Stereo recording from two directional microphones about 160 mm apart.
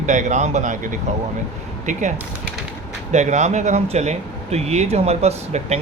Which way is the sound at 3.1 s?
45° right (ahead or behind).